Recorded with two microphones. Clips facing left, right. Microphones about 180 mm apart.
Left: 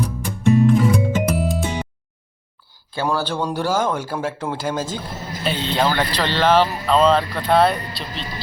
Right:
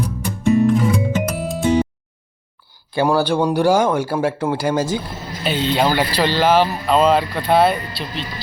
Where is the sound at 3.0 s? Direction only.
15° right (ahead or behind).